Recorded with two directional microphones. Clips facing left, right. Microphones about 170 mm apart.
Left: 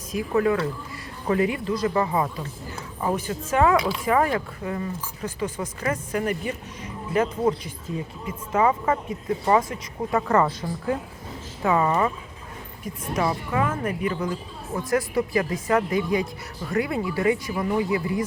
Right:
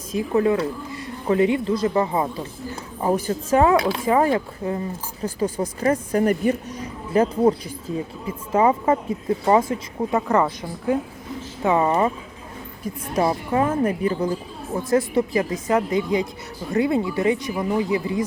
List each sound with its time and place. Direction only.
0.1 s speech: 25° right (ahead or behind)
10.2 s a woman's voice: 15° right (ahead or behind)
11.6 s speech: 25° right (ahead or behind)